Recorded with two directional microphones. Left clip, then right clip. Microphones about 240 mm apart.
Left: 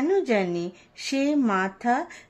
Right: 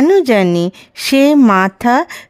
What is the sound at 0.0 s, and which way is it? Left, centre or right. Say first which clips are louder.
A woman's voice: right 13 dB; right.